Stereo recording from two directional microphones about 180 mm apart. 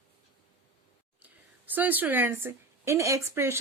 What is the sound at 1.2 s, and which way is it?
A woman's voice, 10° right (ahead or behind).